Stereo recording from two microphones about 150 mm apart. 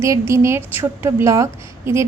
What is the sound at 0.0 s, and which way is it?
A woman's voice, 20° right (ahead or behind).